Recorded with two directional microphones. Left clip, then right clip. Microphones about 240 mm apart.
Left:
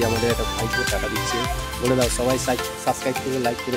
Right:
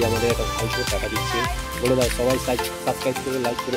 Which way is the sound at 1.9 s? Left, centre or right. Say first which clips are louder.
Even; centre.